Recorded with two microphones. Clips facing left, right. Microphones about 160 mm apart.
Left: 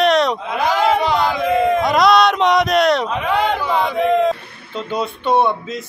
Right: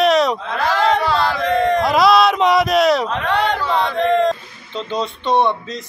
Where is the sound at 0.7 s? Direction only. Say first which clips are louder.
Even; 5° left (ahead or behind).